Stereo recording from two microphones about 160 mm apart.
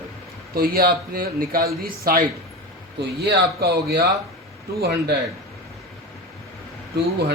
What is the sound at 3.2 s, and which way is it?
Speech, 80° right.